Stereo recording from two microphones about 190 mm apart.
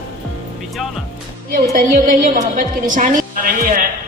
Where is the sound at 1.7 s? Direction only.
45° right (ahead or behind).